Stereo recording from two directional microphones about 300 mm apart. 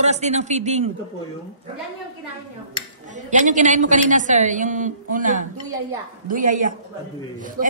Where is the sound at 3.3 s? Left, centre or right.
Right.